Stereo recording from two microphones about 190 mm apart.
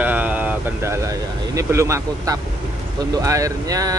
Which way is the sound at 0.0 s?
10° right (ahead or behind).